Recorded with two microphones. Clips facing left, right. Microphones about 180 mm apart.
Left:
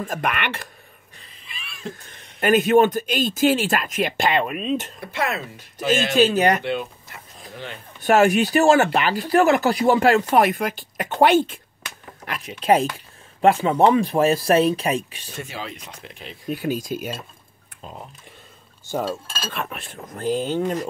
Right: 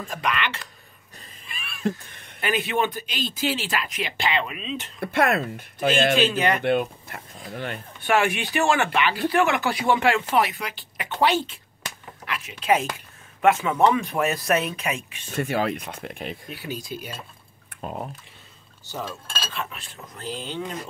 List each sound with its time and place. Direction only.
0.0 s speech: 50° left (ahead or behind)
1.4 s cat: 50° right (ahead or behind)
2.4 s speech: 45° left (ahead or behind)
5.0 s speech: 55° right (ahead or behind)
5.9 s speech: 40° left (ahead or behind)
6.6 s speech: 55° right (ahead or behind)
8.0 s speech: 40° left (ahead or behind)
12.3 s speech: 40° left (ahead or behind)
15.3 s speech: 60° right (ahead or behind)
16.4 s speech: 45° left (ahead or behind)
18.9 s speech: 50° left (ahead or behind)